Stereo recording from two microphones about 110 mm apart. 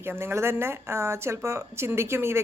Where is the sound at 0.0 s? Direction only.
20° right (ahead or behind).